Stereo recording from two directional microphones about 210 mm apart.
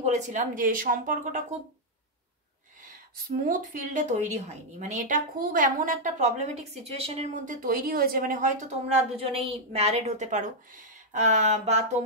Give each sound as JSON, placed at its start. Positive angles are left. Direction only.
{"t": 0.0, "sound": "a woman's voice", "side_deg": -35}
{"t": 3.4, "sound": "a woman's voice", "side_deg": -35}